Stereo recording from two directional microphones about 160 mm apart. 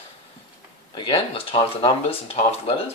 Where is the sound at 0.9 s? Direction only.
35° left (ahead or behind).